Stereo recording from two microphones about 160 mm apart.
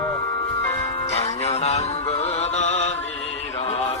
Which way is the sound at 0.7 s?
40° left (ahead or behind).